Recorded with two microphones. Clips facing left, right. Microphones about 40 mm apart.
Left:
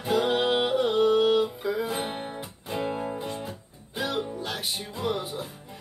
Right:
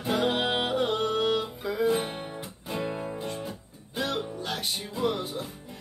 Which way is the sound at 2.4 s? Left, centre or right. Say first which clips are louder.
Even; centre.